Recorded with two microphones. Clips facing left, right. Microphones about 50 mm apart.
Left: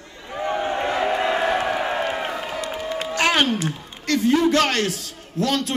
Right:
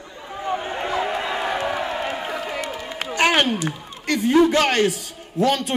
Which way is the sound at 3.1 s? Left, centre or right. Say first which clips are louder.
Right 1 dB; centre.